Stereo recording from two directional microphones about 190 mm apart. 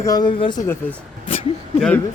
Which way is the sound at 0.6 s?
10° left (ahead or behind).